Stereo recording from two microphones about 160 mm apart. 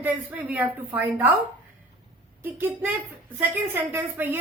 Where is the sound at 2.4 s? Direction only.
15° right (ahead or behind).